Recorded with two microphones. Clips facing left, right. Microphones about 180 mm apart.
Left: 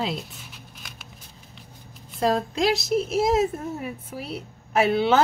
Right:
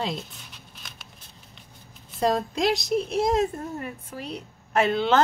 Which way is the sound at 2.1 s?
Centre (ahead or behind).